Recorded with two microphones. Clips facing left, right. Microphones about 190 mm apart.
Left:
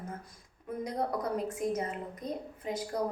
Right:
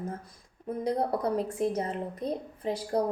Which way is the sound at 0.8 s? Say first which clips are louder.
Right 5 dB; 30° right (ahead or behind).